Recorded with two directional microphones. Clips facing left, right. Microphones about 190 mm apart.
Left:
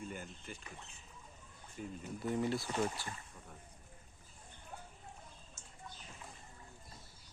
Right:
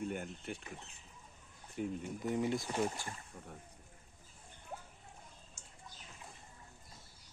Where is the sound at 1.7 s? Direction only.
70° right (ahead or behind).